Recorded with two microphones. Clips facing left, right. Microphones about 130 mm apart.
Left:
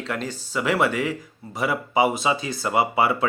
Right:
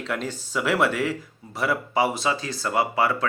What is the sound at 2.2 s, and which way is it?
Speech, 15° left (ahead or behind).